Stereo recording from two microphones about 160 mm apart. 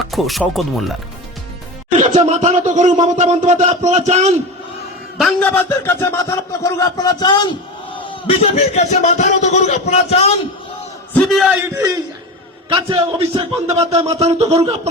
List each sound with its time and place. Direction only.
0.0 s speech: centre (ahead or behind)
2.2 s speech: 45° right (ahead or behind)
5.1 s a man's voice: 5° left (ahead or behind); by 10.3 s 40° left (ahead or behind)
11.1 s a sound: 10° left (ahead or behind)
11.3 s a man's voice: 5° right (ahead or behind)
11.7 s a man's voice: 20° right (ahead or behind)
12.6 s a man's voice: 35° right (ahead or behind)